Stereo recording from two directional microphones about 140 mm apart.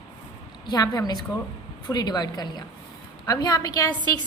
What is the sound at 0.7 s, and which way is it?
A woman's voice, 30° left (ahead or behind).